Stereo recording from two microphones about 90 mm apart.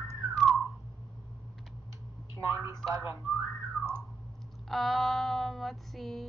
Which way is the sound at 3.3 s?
Centre (ahead or behind).